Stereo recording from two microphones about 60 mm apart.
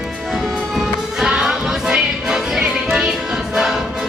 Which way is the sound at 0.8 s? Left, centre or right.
Centre.